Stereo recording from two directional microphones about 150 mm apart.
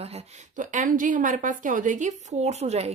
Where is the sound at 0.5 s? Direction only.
60° right (ahead or behind).